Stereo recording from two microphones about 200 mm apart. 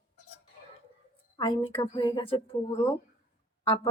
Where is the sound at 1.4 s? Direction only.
25° left (ahead or behind).